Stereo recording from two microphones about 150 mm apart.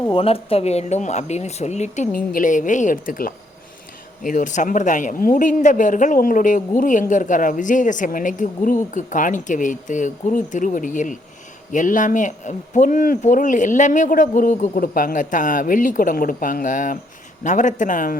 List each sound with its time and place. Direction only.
0.1 s speech: 40° left (ahead or behind)
2.1 s speech: 65° left (ahead or behind)